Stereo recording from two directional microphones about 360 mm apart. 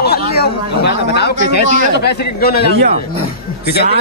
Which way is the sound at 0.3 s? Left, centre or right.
Left.